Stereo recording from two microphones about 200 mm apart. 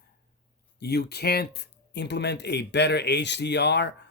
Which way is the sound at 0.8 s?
55° left (ahead or behind).